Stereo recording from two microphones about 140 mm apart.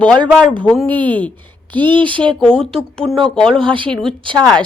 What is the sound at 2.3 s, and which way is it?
Speech, 5° left (ahead or behind).